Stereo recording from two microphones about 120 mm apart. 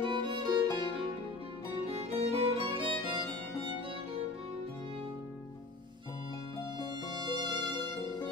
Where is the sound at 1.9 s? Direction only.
60° right (ahead or behind).